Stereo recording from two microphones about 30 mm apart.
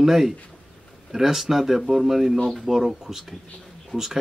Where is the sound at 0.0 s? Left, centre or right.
Centre.